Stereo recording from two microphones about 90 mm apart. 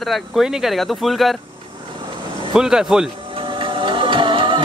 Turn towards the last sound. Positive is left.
turn(degrees=-70)  # may be behind; listen again after turning